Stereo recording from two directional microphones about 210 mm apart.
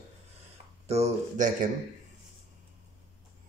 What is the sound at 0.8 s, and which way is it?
Speech, 30° right (ahead or behind).